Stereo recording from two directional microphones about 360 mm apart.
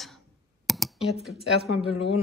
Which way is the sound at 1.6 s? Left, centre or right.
Left.